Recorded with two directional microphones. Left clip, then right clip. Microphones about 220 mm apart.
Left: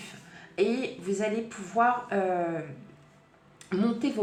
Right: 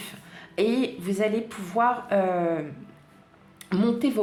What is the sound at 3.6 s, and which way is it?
Speech, 40° right (ahead or behind).